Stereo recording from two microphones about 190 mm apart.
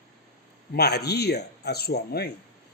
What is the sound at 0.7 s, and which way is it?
Speech, 60° left (ahead or behind).